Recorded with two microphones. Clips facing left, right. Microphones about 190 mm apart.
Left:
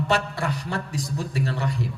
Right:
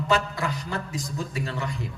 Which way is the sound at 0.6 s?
35° left (ahead or behind).